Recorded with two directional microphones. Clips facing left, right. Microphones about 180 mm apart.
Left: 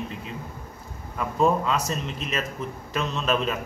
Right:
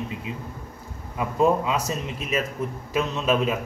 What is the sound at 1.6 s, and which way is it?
Speech, 10° right (ahead or behind).